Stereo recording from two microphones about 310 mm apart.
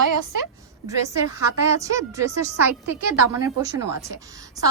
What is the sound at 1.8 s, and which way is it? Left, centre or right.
A woman's voice, centre.